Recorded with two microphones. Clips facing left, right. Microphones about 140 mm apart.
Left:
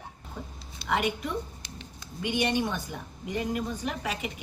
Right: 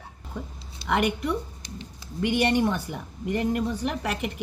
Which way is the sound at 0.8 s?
65° right (ahead or behind).